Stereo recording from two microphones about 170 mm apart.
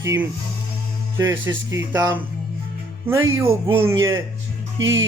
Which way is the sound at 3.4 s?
30° right (ahead or behind).